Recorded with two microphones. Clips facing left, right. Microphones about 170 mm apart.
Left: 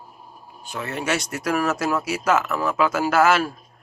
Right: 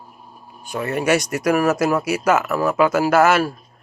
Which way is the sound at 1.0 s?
10° right (ahead or behind).